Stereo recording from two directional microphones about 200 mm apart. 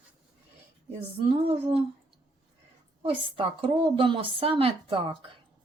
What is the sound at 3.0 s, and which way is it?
A woman's voice, 25° right (ahead or behind).